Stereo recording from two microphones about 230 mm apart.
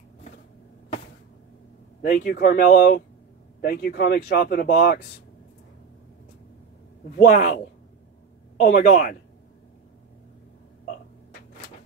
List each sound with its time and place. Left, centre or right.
2.0 s speech: left
7.2 s speech: left